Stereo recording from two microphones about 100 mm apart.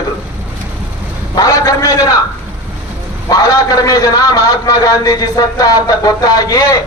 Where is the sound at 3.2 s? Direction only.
35° left (ahead or behind).